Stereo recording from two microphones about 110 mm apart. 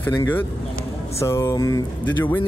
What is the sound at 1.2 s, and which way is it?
Speech, 25° left (ahead or behind).